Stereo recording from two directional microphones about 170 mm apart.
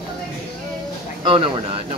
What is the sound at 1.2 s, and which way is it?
Speech, 30° right (ahead or behind).